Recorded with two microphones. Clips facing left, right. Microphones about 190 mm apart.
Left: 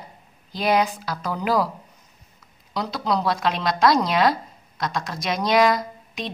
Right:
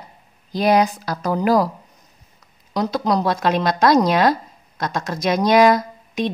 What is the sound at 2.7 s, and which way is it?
Speech, 45° right (ahead or behind).